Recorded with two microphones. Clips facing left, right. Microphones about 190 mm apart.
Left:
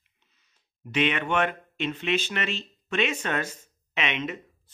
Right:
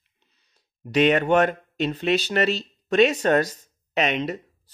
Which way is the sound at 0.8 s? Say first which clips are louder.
Right 8 dB; 40° right (ahead or behind).